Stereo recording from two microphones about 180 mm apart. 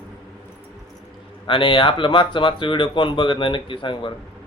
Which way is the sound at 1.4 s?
30° left (ahead or behind).